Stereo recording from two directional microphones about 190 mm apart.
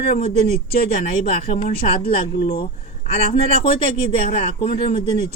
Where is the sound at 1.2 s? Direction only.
35° left (ahead or behind).